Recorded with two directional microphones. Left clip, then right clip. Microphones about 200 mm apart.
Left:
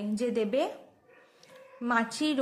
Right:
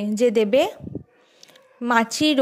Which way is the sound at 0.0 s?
40° right (ahead or behind).